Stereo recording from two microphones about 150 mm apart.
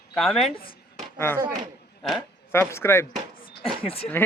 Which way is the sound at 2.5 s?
15° left (ahead or behind).